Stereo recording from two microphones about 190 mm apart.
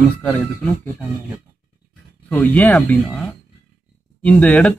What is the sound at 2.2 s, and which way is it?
Speech, 10° left (ahead or behind).